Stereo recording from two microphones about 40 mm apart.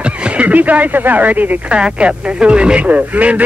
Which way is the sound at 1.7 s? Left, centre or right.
Right.